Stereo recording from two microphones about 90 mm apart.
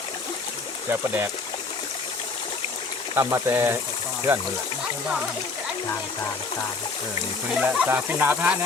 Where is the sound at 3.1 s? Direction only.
30° right (ahead or behind).